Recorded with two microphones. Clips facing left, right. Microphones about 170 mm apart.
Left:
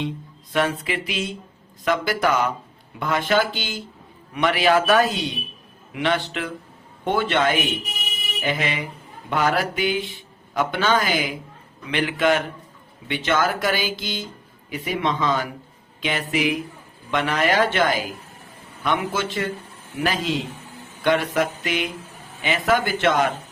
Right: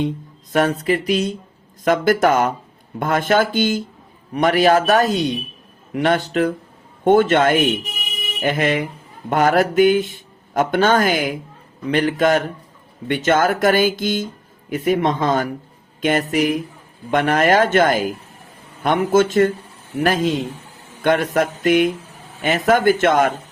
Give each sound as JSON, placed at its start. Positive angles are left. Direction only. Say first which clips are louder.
{"t": 0.5, "sound": "a man's voice", "louder": "right 6 dB", "side_deg": -40}